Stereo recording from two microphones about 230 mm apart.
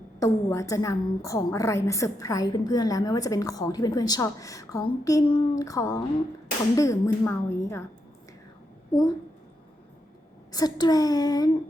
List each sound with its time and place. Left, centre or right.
0.2 s a woman's voice: centre
8.9 s a woman's voice: centre
10.5 s a woman's voice: centre